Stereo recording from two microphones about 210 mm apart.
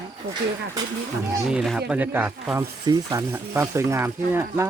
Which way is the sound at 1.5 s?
Centre (ahead or behind).